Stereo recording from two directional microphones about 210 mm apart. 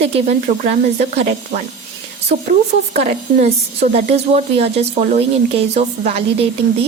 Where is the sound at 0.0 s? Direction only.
35° right (ahead or behind).